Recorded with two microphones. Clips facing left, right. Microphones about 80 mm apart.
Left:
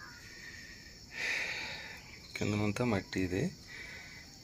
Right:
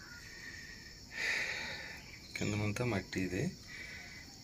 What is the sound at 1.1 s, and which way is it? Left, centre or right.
Snort, right.